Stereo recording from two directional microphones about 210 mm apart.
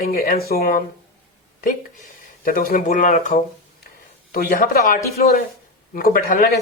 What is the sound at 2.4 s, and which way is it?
Speech, 45° left (ahead or behind).